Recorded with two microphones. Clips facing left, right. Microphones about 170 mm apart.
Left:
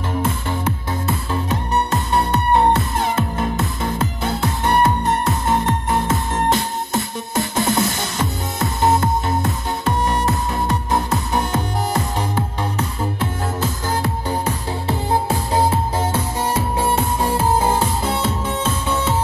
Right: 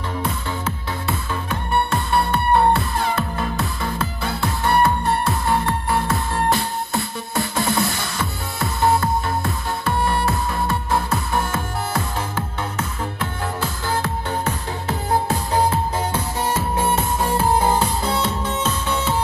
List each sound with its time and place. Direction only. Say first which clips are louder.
1.3 s music: left 2 dB; 35° left (ahead or behind)
2.1 s music: left 1 dB; 20° left (ahead or behind)
13.6 s music: left 1 dB; 15° left (ahead or behind)
16.7 s music: left 1 dB; 10° left (ahead or behind)